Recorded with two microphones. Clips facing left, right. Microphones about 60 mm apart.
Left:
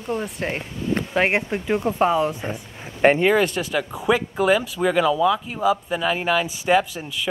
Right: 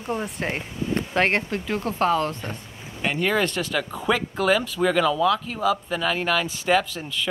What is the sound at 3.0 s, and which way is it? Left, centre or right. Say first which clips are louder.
Speech: left 11 dB; left.